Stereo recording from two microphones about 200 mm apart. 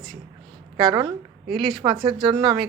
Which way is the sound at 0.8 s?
20° right (ahead or behind).